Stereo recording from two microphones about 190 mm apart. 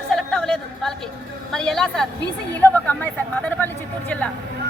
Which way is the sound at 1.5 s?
Centre (ahead or behind).